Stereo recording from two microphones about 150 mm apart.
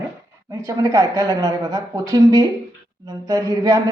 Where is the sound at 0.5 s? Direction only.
20° right (ahead or behind).